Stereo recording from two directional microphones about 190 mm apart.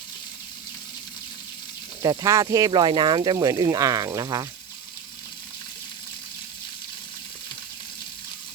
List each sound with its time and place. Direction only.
2.0 s speech: 15° right (ahead or behind)